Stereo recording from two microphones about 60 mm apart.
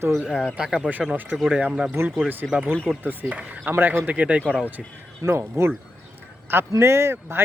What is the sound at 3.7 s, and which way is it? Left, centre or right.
Speech, right.